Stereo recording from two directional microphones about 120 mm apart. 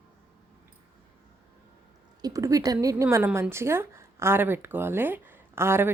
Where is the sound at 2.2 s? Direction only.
30° right (ahead or behind).